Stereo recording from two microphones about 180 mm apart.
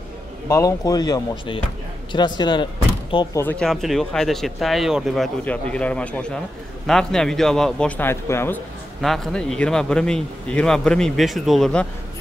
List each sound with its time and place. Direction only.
0.5 s speech: 20° left (ahead or behind)
3.3 s speech: 10° left (ahead or behind)
9.0 s speech: centre (ahead or behind)